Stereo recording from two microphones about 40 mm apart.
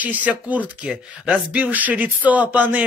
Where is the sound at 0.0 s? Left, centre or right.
Right.